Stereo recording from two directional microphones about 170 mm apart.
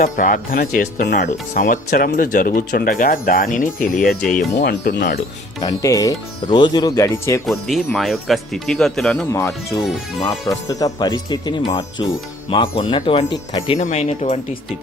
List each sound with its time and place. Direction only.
0.0 s speech: 50° left (ahead or behind)
4.6 s speech: 75° left (ahead or behind)
5.6 s speech: 20° left (ahead or behind)
7.9 s speech: centre (ahead or behind)
9.3 s speech: 15° left (ahead or behind)
13.7 s speech: 45° left (ahead or behind)